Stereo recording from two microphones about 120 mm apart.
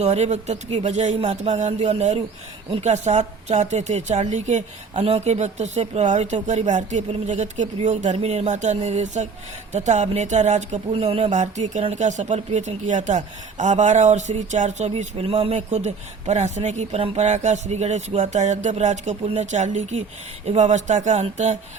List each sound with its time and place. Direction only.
0.0 s speech: 65° right (ahead or behind)
7.8 s speech: 70° right (ahead or behind)
10.9 s speech: 55° right (ahead or behind)
11.3 s speech: 75° right (ahead or behind)